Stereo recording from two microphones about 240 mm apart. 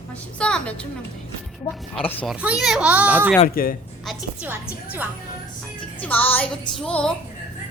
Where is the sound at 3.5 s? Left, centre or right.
Left.